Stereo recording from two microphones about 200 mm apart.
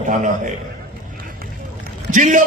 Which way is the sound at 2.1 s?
40° right (ahead or behind).